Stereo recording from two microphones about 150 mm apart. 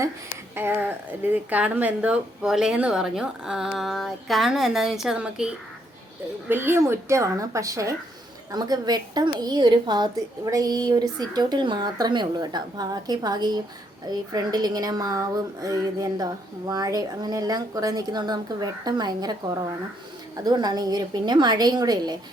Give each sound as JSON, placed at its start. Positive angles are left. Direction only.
{"t": 0.5, "sound": "a woman's voice", "side_deg": -15}